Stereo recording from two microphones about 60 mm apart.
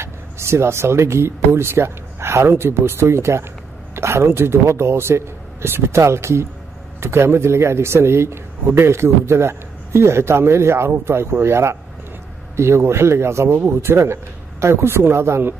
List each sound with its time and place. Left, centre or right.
0.0 s a man's voice: right